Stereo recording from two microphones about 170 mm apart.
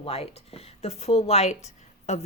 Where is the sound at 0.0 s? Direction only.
35° left (ahead or behind).